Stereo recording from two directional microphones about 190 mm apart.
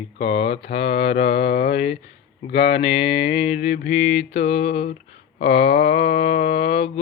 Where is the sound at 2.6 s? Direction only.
30° left (ahead or behind).